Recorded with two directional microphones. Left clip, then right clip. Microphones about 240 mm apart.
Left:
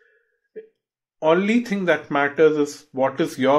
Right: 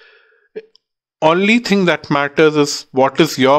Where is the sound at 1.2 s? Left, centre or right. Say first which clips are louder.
Right 6 dB; right.